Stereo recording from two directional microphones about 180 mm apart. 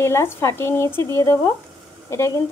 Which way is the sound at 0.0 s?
15° left (ahead or behind).